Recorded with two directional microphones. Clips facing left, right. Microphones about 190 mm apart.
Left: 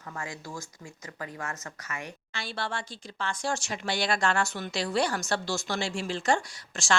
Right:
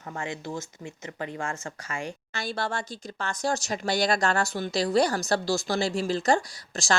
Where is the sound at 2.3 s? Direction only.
45° right (ahead or behind).